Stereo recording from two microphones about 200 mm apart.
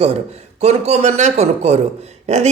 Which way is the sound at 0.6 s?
35° right (ahead or behind).